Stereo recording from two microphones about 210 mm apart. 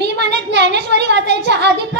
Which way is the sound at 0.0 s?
55° right (ahead or behind).